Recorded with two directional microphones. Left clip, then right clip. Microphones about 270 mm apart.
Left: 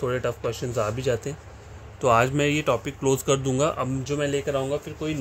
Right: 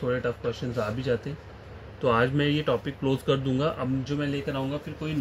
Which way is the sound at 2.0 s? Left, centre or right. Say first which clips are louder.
Left 4 dB; left.